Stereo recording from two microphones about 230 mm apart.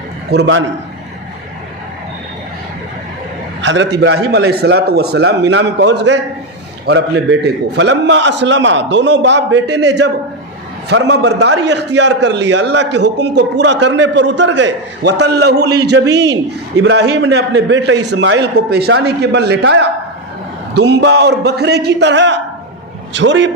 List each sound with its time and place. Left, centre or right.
0.3 s a man's voice: right
3.6 s a man's voice: right